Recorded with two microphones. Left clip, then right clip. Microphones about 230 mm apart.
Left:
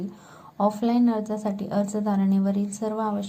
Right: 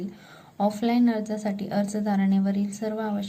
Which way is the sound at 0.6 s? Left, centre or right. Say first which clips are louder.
Left 1 dB; centre.